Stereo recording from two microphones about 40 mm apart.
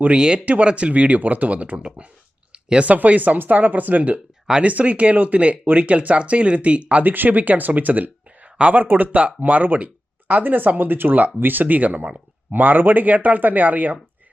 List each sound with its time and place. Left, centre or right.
0.2 s speech: right
2.5 s a sound: right
2.8 s speech: right
7.0 s speech: right
9.1 s speech: right